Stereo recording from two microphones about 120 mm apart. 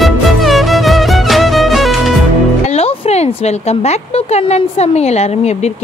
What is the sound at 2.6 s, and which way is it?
Speech, 55° left (ahead or behind).